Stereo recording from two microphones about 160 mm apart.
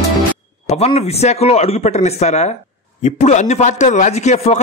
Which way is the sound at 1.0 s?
40° left (ahead or behind).